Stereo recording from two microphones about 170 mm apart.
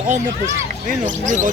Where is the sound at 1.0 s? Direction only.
45° right (ahead or behind).